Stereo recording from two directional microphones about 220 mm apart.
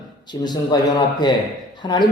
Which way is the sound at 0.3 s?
20° left (ahead or behind).